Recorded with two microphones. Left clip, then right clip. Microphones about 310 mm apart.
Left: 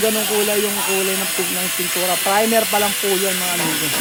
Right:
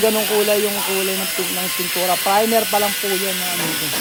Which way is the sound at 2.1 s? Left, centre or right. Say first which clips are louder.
Right 1 dB; centre.